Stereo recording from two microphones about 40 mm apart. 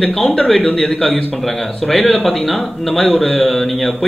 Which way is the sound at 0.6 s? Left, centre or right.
Left.